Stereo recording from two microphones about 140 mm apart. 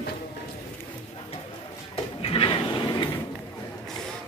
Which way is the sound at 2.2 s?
40° left (ahead or behind).